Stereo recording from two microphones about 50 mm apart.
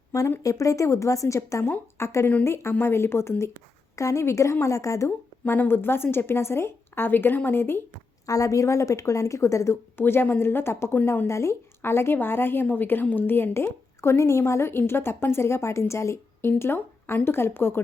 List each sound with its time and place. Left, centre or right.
0.4 s a woman's voice: left
2.0 s a woman's voice: left
3.9 s a woman's voice: left
4.6 s a woman's voice: left
5.6 s a woman's voice: left
8.4 s a woman's voice: left
10.0 s a woman's voice: left
11.3 s speech: left
11.8 s a woman's voice: left
12.6 s a woman's voice: left
14.7 s a woman's voice: left
16.5 s a woman's voice: left